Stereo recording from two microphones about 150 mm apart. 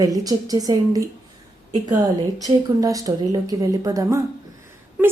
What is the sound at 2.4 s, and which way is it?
A woman's voice, 25° right (ahead or behind).